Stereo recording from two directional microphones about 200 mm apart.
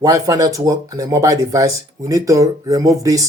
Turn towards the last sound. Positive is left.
turn(degrees=-15)  # may be behind; listen again after turning